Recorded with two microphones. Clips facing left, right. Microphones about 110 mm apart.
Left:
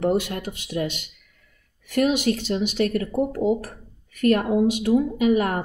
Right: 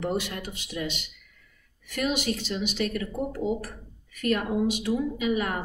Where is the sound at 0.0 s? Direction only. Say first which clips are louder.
Left 7 dB; 50° left (ahead or behind).